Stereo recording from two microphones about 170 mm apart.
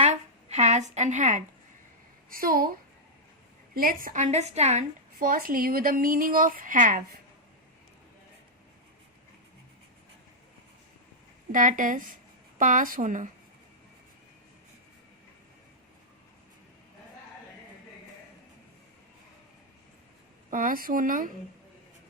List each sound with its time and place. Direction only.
0.0 s a sound: 40° right (ahead or behind)
2.3 s speech: 60° right (ahead or behind)
3.8 s a woman's voice: 55° right (ahead or behind); by 4.8 s 40° right (ahead or behind)
5.2 s speech: 55° right (ahead or behind)
11.5 s speech: 50° right (ahead or behind)
20.5 s speech: 55° right (ahead or behind)